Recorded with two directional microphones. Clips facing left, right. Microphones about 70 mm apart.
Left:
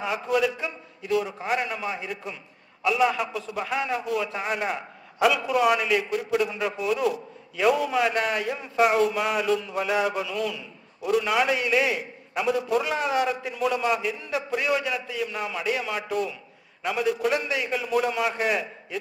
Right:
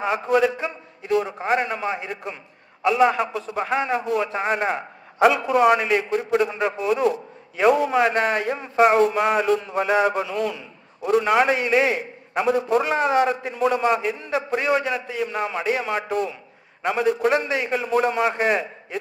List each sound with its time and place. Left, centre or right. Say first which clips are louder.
0.0 s a man's voice: right 5 dB; right